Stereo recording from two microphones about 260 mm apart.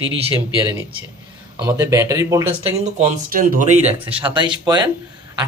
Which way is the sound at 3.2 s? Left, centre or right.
Right.